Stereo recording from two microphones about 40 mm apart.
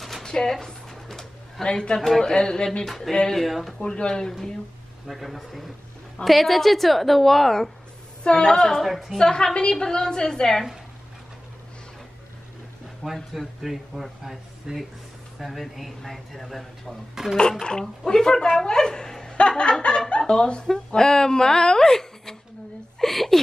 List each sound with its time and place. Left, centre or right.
0.2 s a sound: centre
1.6 s a woman's voice: centre
2.0 s a woman's voice: centre
3.8 s a woman's voice: left
5.0 s speech: centre
8.2 s a woman's voice: left
8.8 s speech: centre
9.2 s a woman's voice: centre
13.0 s speech: centre
17.4 s a woman's voice: left; by 23.4 s centre